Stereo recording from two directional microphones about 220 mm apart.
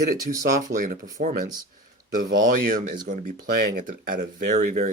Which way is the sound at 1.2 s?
35° right (ahead or behind).